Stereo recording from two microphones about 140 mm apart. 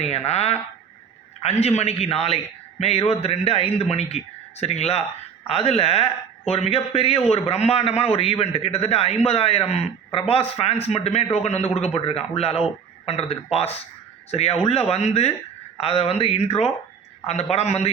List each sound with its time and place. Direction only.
0.3 s a man's voice: 50° left (ahead or behind)